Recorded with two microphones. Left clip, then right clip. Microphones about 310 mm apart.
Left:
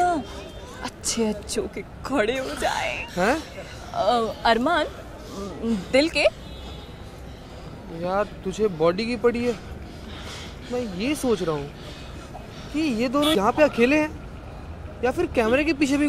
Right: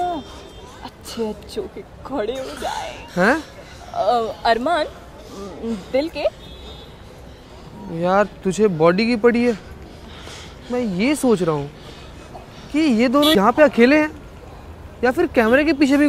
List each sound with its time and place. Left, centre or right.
0.0 s a sound: centre
2.0 s speech: centre
8.0 s speech: right
10.2 s a sound: centre
10.8 s speech: right
12.7 s speech: right